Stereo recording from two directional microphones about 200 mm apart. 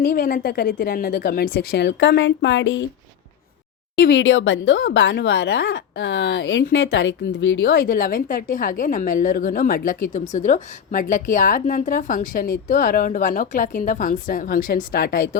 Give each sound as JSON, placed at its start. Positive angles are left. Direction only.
{"t": 0.0, "sound": "a woman's voice", "side_deg": 45}
{"t": 3.9, "sound": "speech", "side_deg": 50}
{"t": 4.2, "sound": "a woman's voice", "side_deg": 70}